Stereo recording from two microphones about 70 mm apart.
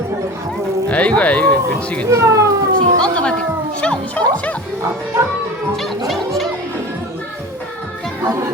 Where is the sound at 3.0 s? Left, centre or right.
Centre.